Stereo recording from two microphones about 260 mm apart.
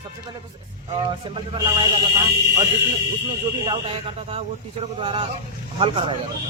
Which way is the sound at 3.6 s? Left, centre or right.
Centre.